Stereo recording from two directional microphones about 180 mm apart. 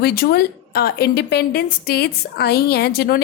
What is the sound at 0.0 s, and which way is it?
A woman's voice, 60° left (ahead or behind).